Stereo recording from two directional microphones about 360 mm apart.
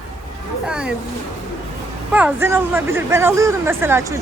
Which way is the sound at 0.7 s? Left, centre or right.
Centre.